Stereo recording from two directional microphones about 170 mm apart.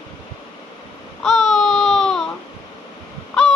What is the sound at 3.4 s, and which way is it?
Crow, 5° left (ahead or behind).